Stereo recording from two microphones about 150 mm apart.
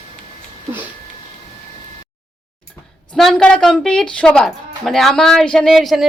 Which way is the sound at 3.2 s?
Centre (ahead or behind).